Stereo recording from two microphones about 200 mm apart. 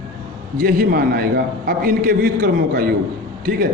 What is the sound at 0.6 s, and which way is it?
A man's voice, 45° right (ahead or behind).